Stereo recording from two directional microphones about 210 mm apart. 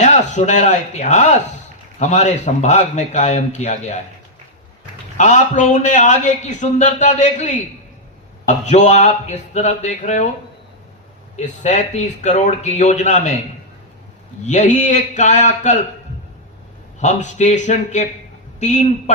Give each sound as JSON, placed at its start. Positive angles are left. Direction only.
{"t": 0.0, "sound": "a man's voice", "side_deg": 35}
{"t": 5.1, "sound": "a man's voice", "side_deg": 35}
{"t": 11.3, "sound": "a man's voice", "side_deg": 35}
{"t": 14.4, "sound": "a man's voice", "side_deg": 35}
{"t": 17.0, "sound": "a man's voice", "side_deg": 35}